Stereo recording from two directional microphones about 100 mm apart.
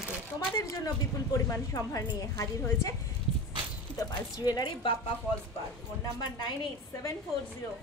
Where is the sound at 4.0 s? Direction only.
40° left (ahead or behind).